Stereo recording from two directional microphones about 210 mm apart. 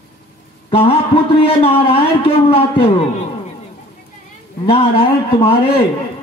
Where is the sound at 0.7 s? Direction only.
25° left (ahead or behind).